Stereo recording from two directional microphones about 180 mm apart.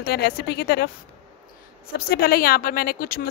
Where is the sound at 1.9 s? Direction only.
55° left (ahead or behind).